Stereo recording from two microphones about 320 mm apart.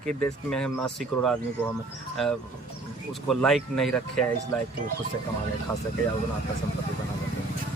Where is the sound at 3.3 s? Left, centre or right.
Centre.